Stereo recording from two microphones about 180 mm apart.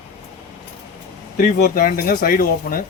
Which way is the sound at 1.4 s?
50° left (ahead or behind).